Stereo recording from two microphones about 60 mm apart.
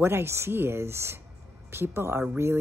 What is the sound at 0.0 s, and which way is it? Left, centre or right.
A woman's voice, right.